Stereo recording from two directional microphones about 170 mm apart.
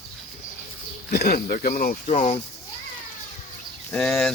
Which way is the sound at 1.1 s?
65° left (ahead or behind).